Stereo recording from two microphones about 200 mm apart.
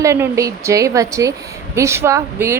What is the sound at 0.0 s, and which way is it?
A woman's voice, 15° right (ahead or behind).